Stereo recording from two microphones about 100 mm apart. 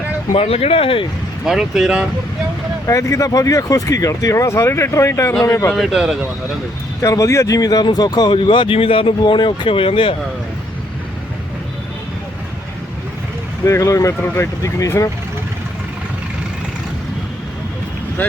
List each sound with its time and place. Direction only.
0.3 s speech: 80° left
1.5 s speech: 5° right (ahead or behind)
2.8 s speech: 30° left (ahead or behind)
5.7 s speech: centre (ahead or behind)
7.0 s speech: 35° left (ahead or behind); by 10.2 s 65° left (ahead or behind)
13.7 s speech: 30° left (ahead or behind)